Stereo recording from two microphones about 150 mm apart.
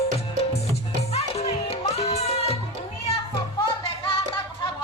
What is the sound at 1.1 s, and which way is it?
Music, 45° left (ahead or behind).